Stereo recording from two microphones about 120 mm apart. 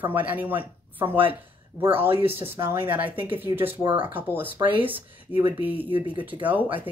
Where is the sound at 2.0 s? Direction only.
20° right (ahead or behind).